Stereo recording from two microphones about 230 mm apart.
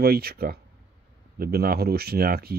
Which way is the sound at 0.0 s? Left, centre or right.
Right.